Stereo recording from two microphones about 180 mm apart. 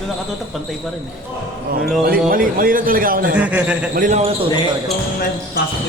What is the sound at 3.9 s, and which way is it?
Speech, 45° right (ahead or behind).